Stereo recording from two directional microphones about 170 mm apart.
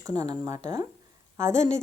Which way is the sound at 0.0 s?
20° right (ahead or behind).